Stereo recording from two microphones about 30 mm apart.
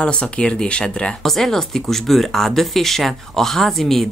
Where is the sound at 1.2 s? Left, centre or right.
Centre.